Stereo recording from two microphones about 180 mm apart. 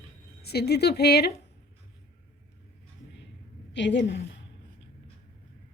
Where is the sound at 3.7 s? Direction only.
75° left (ahead or behind).